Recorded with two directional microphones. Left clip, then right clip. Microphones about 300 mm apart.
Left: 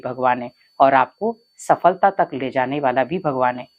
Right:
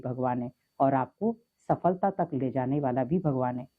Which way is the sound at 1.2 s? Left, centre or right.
Left.